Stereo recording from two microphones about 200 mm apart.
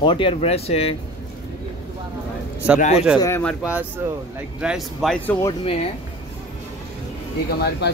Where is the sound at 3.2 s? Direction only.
10° left (ahead or behind).